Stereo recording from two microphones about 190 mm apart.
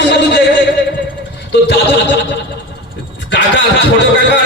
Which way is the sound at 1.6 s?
60° left (ahead or behind).